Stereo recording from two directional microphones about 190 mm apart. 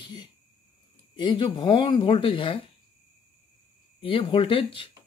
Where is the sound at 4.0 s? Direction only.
25° left (ahead or behind).